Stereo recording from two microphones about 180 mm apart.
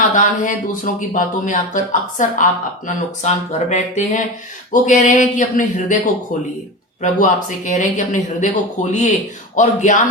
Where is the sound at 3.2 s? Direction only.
40° left (ahead or behind).